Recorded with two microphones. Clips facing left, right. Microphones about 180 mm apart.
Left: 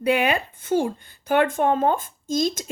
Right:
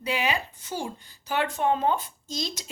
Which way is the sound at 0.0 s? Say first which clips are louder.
Left 7 dB; 55° left (ahead or behind).